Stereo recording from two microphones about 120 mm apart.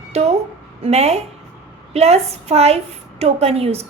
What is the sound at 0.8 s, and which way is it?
A woman's voice, 60° right (ahead or behind).